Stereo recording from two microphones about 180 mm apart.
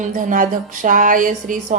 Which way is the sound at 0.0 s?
45° right (ahead or behind).